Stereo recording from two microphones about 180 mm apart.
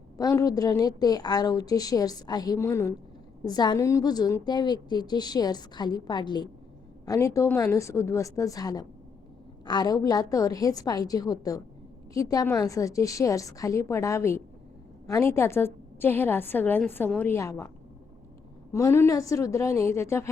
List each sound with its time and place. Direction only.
0.2 s a woman's voice: 20° left (ahead or behind)
18.7 s a woman's voice: 15° left (ahead or behind)